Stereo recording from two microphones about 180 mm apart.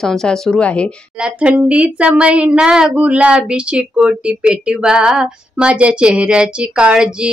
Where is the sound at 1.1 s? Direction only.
5° right (ahead or behind).